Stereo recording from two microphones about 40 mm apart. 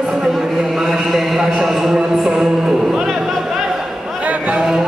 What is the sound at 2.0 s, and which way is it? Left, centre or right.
Music, centre.